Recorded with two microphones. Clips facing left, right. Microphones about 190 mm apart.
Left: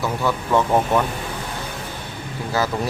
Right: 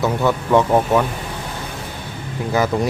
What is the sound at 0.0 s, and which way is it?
Speech, 20° right (ahead or behind).